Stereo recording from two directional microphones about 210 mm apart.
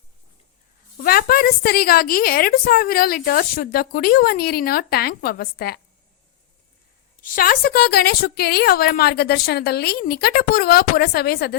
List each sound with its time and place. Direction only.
0.9 s a woman's voice: 45° left (ahead or behind)
7.2 s a woman's voice: 45° left (ahead or behind)